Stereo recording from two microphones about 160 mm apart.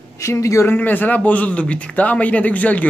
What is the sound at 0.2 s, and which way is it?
A man's voice, 20° left (ahead or behind).